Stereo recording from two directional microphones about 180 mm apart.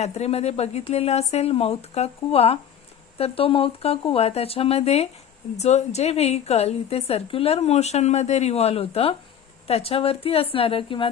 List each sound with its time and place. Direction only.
0.0 s a woman's voice: 35° left (ahead or behind)